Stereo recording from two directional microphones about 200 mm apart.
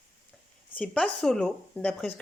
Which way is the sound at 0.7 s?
5° left (ahead or behind).